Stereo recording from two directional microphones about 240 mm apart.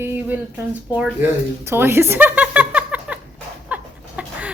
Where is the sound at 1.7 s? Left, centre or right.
Centre.